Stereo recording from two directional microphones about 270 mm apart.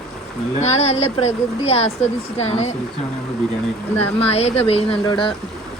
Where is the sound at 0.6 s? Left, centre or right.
Left.